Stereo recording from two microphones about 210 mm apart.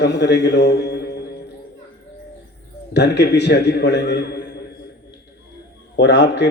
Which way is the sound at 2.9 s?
55° left (ahead or behind).